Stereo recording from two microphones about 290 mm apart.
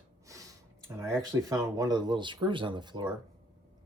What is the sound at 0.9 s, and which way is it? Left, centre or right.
Speech, centre.